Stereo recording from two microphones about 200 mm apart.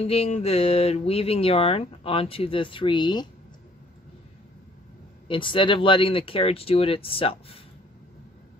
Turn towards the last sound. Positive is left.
turn(degrees=25)  # may be behind; listen again after turning